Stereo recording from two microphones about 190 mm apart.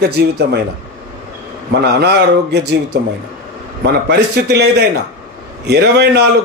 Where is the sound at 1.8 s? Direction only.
60° right (ahead or behind).